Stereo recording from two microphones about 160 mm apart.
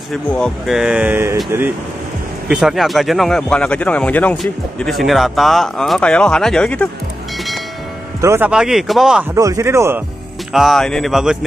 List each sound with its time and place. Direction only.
0.1 s speech: 5° left (ahead or behind); by 1.7 s 15° right (ahead or behind)
2.5 s speech: centre (ahead or behind)
8.2 s speech: 15° right (ahead or behind)
8.5 s speech: 5° right (ahead or behind)
9.3 s speech: 20° right (ahead or behind)
10.5 s speech: centre (ahead or behind)